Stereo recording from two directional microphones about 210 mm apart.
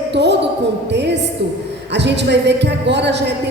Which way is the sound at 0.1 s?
55° right (ahead or behind).